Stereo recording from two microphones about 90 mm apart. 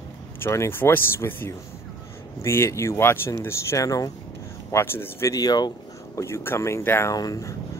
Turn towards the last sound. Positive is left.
turn(degrees=40)  # may be behind; listen again after turning